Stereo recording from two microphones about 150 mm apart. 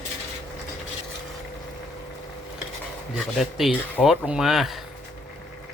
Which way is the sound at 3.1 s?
5° right (ahead or behind).